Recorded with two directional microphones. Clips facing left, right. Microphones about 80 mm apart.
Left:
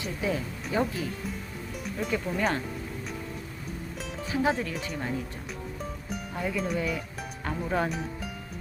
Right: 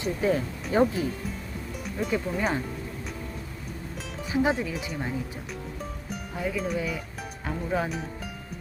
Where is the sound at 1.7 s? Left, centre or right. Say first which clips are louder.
Right 2 dB; centre.